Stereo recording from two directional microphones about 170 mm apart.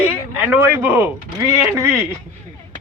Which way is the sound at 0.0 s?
10° right (ahead or behind).